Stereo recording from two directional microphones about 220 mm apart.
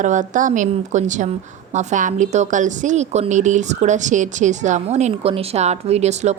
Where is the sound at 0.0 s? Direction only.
35° right (ahead or behind).